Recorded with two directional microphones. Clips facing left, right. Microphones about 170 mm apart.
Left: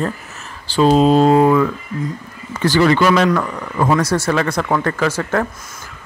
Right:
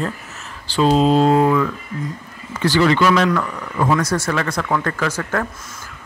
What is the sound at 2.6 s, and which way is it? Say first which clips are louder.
Speech: left 2 dB; 45° left (ahead or behind).